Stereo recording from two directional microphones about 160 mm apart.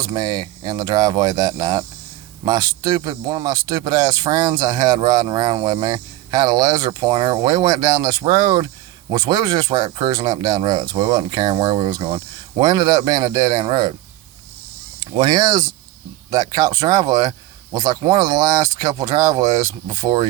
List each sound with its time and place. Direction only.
0.0 s speech: 25° right (ahead or behind)
15.0 s speech: 30° right (ahead or behind)